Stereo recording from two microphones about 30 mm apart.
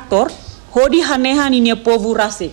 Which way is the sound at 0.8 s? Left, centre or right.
Left.